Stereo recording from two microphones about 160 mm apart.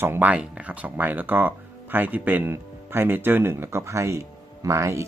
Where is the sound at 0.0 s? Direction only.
10° right (ahead or behind).